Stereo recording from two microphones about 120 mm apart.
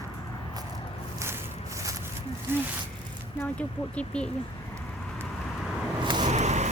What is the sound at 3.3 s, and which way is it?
Speech, 10° left (ahead or behind).